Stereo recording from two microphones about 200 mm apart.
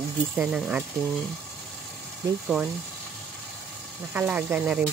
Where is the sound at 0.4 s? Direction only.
5° right (ahead or behind).